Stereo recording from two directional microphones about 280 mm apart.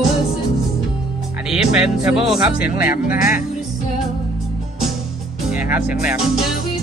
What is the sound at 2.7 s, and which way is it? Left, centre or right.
Speech, left.